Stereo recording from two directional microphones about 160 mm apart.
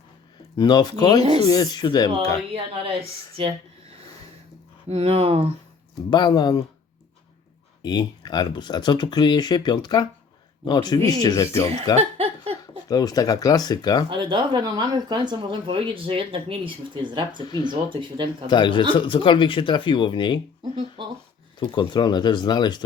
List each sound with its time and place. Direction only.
0.5 s speech: 25° left (ahead or behind)
1.2 s speech: 40° right (ahead or behind)
1.5 s speech: 25° left (ahead or behind)
3.4 s speech: 35° right (ahead or behind)
4.9 s speech: 40° right (ahead or behind)
6.1 s speech: 25° left (ahead or behind)
7.8 s speech: 25° left (ahead or behind)
11.9 s a sound: 40° right (ahead or behind)
12.9 s speech: 25° left (ahead or behind)
14.1 s speech: 30° right (ahead or behind)
18.4 s speech: 30° left (ahead or behind)
21.0 s speech: 30° right (ahead or behind)
21.6 s speech: 30° left (ahead or behind)